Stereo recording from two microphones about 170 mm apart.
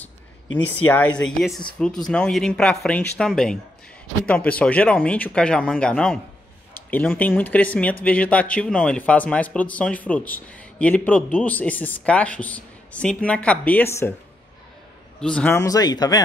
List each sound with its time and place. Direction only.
0.8 s speech: 10° left (ahead or behind)
15.1 s a man's voice: 5° left (ahead or behind); by 16.2 s 25° left (ahead or behind)